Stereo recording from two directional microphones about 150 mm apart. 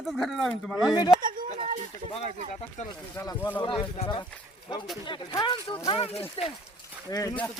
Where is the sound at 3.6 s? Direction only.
35° left (ahead or behind).